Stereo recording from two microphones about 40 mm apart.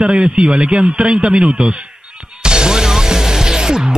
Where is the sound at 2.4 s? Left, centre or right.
Centre.